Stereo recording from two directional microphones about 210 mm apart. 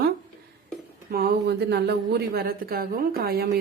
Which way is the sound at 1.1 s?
45° right (ahead or behind).